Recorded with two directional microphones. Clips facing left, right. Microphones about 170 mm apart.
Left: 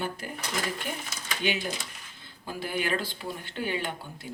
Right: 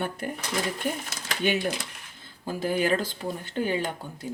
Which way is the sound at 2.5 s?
40° right (ahead or behind).